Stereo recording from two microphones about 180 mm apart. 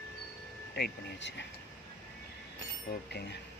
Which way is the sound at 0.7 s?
70° left (ahead or behind).